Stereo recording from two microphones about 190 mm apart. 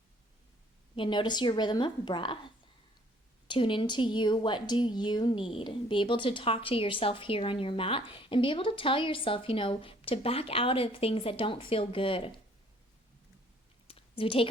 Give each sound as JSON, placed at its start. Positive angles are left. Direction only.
{"t": 0.9, "sound": "a woman's voice", "side_deg": 25}
{"t": 3.4, "sound": "a woman's voice", "side_deg": 25}
{"t": 13.8, "sound": "a sound", "side_deg": 30}